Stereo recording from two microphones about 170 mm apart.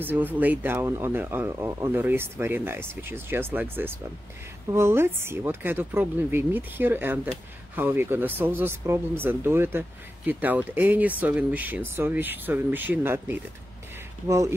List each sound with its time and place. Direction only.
0.0 s speech: 10° right (ahead or behind)